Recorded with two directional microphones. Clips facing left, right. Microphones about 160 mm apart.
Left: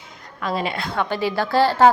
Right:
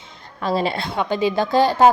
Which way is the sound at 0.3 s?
30° right (ahead or behind).